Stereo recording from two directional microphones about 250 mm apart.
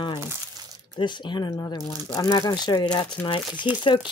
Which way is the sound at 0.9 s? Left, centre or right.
Centre.